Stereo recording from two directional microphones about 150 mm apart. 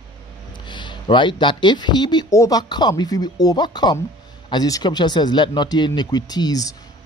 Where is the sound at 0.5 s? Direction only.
30° left (ahead or behind).